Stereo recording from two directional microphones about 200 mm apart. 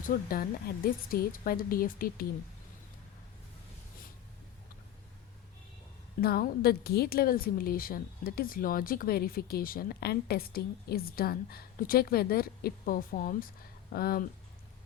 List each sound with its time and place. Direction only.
0.0 s a woman's voice: 45° left (ahead or behind)
6.2 s a woman's voice: 50° left (ahead or behind)